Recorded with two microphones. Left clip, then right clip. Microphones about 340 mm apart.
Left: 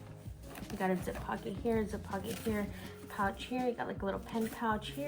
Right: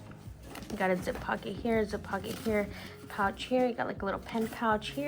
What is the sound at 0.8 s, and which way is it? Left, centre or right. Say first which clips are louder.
Speech: right 5 dB; right.